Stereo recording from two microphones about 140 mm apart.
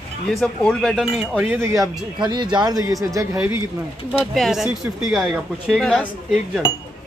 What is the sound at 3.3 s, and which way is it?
Speech, 15° right (ahead or behind).